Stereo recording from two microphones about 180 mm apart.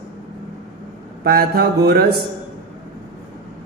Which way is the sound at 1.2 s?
55° right (ahead or behind).